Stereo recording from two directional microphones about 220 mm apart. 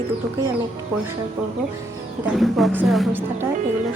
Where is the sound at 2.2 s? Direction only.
Centre (ahead or behind).